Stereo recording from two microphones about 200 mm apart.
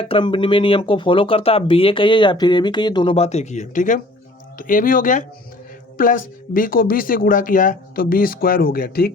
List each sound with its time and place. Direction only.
0.0 s speech: 25° left (ahead or behind); by 9.1 s 50° left (ahead or behind)